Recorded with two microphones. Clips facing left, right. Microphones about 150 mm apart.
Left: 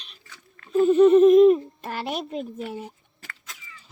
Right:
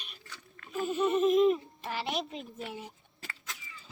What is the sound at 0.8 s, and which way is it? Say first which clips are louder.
A child's voice: left 13 dB; 55° left (ahead or behind).